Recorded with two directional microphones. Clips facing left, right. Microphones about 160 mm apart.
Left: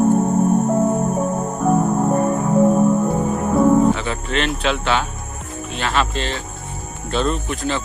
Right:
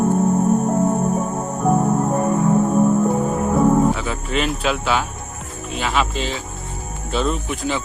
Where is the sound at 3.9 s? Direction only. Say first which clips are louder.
Even; centre (ahead or behind).